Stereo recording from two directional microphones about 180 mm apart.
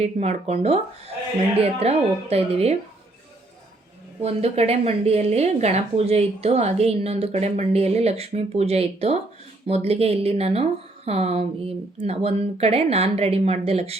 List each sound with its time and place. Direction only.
0.0 s a woman's voice: 35° right (ahead or behind)
4.2 s a woman's voice: 35° right (ahead or behind)